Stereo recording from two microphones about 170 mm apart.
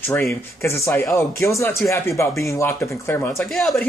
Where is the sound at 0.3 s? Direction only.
15° left (ahead or behind).